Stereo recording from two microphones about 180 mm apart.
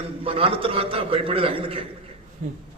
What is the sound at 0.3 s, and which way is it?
A man's voice, 30° right (ahead or behind).